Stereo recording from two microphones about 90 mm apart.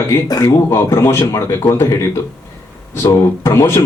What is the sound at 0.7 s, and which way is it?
Speech, 30° left (ahead or behind).